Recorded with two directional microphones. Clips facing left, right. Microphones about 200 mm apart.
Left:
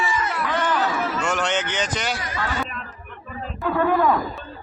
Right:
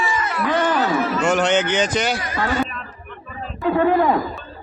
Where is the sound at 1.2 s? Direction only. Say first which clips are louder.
Right 9 dB; 20° right (ahead or behind).